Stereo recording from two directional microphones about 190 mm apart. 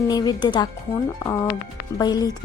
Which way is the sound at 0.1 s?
20° left (ahead or behind).